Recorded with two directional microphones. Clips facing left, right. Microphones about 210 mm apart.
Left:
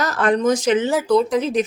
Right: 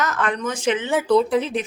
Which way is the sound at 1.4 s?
40° left (ahead or behind).